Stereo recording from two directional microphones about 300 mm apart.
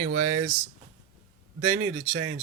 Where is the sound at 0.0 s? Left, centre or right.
Right.